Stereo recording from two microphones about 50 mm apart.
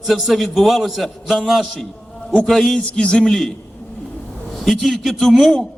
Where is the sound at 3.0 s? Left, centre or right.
Centre.